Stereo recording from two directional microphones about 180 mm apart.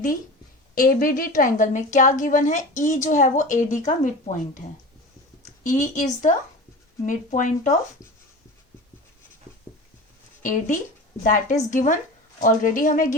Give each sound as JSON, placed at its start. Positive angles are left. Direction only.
{"t": 0.8, "sound": "a woman's voice", "side_deg": 50}
{"t": 5.6, "sound": "a woman's voice", "side_deg": 45}
{"t": 11.2, "sound": "a woman's voice", "side_deg": 45}